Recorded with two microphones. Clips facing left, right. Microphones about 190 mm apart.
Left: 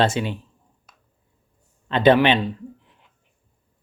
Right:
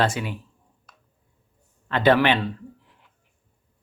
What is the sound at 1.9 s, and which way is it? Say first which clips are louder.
Speech: left 3 dB; 20° left (ahead or behind).